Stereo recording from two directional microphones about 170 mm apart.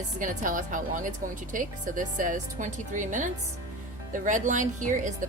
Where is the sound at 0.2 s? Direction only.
50° right (ahead or behind).